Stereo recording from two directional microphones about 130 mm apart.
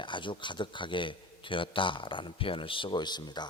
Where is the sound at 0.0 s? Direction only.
40° left (ahead or behind).